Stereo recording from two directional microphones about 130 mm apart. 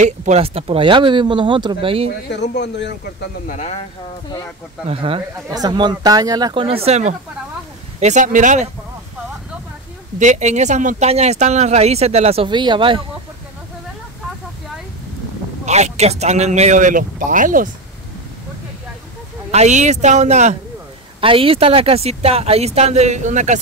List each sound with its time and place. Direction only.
0.0 s a woman's voice: 70° right (ahead or behind)
0.4 s speech: 50° right (ahead or behind)
3.4 s speech: 65° left (ahead or behind)
4.8 s speech: 45° right (ahead or behind)
5.5 s speech: 30° right (ahead or behind)
6.6 s speech: 50° right (ahead or behind)
8.0 s a woman's voice: 70° right (ahead or behind)
10.1 s a woman's voice: 70° right (ahead or behind)
11.1 s a man's voice: 55° right (ahead or behind)
12.4 s speech: 35° right (ahead or behind)
15.6 s a man's voice: 60° right (ahead or behind); by 17.6 s 90° right
19.5 s a man's voice: 65° right (ahead or behind)
21.2 s speech: 45° right (ahead or behind); by 23.6 s 70° right (ahead or behind)